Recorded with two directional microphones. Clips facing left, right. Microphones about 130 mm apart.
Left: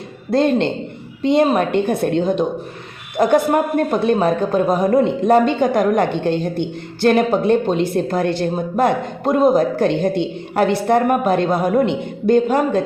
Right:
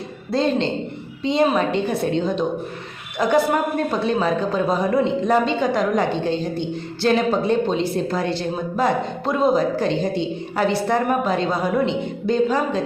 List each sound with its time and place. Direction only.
0.3 s a man's voice: 55° left (ahead or behind)